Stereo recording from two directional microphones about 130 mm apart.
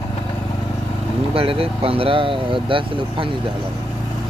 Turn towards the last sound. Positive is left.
turn(degrees=-40)  # may be behind; listen again after turning